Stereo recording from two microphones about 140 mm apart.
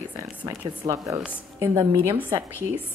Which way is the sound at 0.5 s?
20° right (ahead or behind).